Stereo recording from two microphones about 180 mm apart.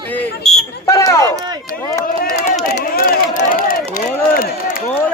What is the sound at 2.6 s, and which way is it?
Speech, 60° left (ahead or behind).